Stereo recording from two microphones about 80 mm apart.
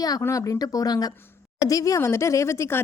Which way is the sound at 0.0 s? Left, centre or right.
Left.